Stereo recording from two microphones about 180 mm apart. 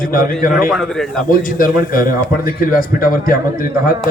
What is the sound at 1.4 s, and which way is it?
A man's voice, 50° left (ahead or behind).